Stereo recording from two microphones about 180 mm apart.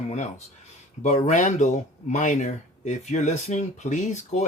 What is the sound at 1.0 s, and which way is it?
Speech, 40° left (ahead or behind).